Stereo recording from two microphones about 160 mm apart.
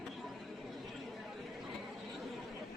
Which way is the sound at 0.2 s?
Centre (ahead or behind).